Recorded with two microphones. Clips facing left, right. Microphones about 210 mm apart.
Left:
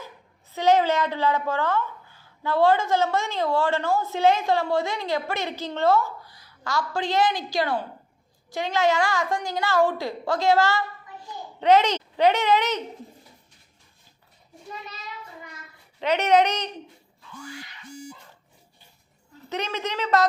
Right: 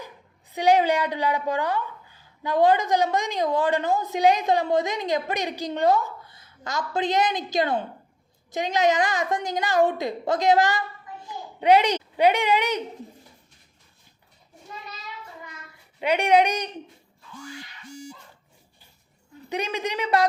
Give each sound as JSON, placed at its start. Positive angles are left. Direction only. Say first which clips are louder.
{"t": 0.5, "sound": "a woman's voice", "louder": "even", "side_deg": -15}
{"t": 16.0, "sound": "a woman's voice", "louder": "even", "side_deg": -10}
{"t": 19.5, "sound": "a woman's voice", "louder": "right 1 dB", "side_deg": -10}